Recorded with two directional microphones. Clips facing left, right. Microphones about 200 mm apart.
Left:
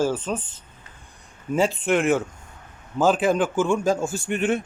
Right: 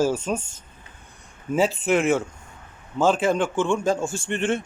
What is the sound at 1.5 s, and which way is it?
Speech, 5° right (ahead or behind).